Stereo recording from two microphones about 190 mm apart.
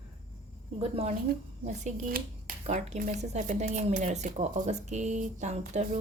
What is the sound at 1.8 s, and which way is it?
Speech, 45° right (ahead or behind).